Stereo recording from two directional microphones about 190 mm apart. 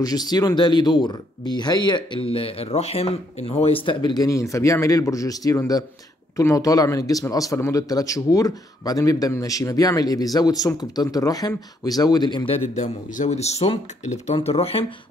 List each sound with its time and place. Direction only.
0.0 s speech: 20° left (ahead or behind)
12.7 s speech: 40° left (ahead or behind)